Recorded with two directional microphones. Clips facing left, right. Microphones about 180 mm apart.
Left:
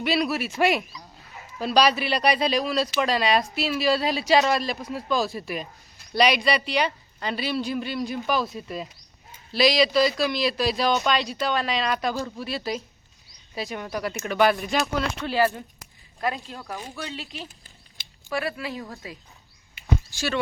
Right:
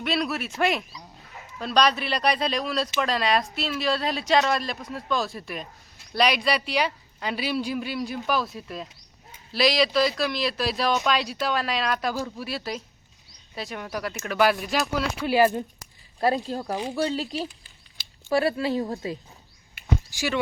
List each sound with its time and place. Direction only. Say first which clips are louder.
0.0 s speech: left 3 dB; centre (ahead or behind)
16.2 s speech: right 5 dB; 35° right (ahead or behind)
20.1 s speech: right 2 dB; 15° right (ahead or behind)